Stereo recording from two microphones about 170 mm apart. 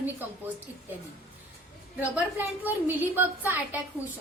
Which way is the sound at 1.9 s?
10° right (ahead or behind).